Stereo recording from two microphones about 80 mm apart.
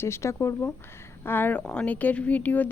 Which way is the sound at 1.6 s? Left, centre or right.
Centre.